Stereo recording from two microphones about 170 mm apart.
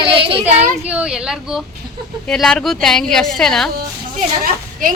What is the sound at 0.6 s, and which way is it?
A woman's voice, 10° right (ahead or behind).